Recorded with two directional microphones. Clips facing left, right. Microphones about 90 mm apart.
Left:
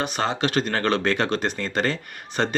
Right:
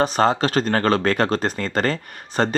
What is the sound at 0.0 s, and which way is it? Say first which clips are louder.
Speech: right 6 dB; 40° right (ahead or behind).